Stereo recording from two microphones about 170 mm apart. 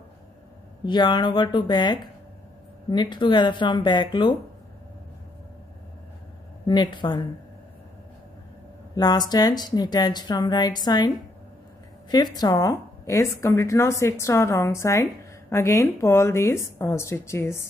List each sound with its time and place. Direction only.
0.8 s speech: 25° left (ahead or behind)
6.6 s speech: 25° left (ahead or behind)
8.9 s speech: 25° left (ahead or behind)
12.4 s a woman's voice: 20° left (ahead or behind)